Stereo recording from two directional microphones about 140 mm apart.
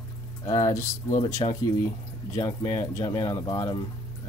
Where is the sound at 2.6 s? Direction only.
20° left (ahead or behind).